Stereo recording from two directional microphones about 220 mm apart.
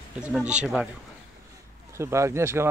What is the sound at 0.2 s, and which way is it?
Speech, 5° right (ahead or behind).